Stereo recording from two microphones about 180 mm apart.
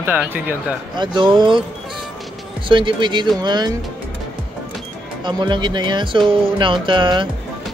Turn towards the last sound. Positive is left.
turn(degrees=-25)  # may be behind; listen again after turning